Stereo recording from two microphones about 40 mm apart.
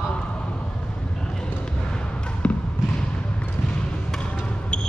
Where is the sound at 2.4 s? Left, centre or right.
Left.